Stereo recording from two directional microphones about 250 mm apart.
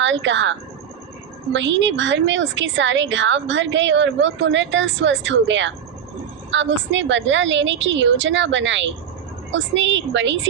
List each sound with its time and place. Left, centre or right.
0.0 s a woman's voice: right
1.5 s a woman's voice: right